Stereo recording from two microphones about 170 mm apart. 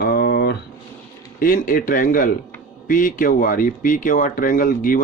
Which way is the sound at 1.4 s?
55° left (ahead or behind).